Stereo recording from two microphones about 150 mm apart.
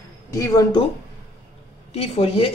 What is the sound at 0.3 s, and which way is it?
Speech, 25° left (ahead or behind).